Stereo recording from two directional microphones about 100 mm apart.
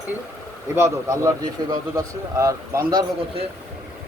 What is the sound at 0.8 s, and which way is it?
Speech, 30° right (ahead or behind).